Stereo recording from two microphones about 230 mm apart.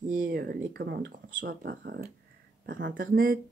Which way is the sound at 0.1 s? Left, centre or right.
Right.